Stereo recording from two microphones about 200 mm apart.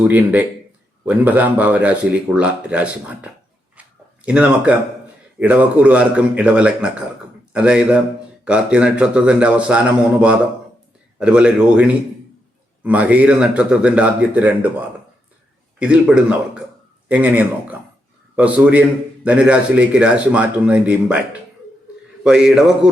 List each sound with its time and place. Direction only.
0.1 s speech: 10° right (ahead or behind)
3.8 s a sound: 5° right (ahead or behind)
4.3 s a man's voice: 5° right (ahead or behind)
22.2 s a man's voice: 5° right (ahead or behind)